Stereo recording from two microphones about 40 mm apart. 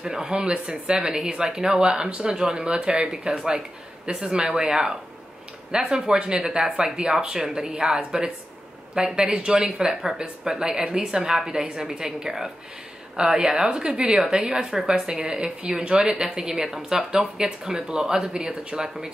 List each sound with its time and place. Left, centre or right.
0.0 s speech: centre
18.5 s speech: right
18.8 s speech: centre